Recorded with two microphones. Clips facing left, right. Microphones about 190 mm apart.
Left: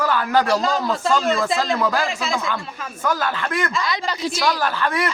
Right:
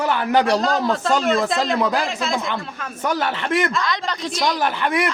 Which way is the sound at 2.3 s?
20° right (ahead or behind).